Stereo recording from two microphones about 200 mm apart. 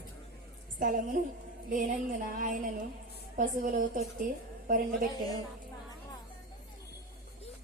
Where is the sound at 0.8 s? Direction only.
45° right (ahead or behind).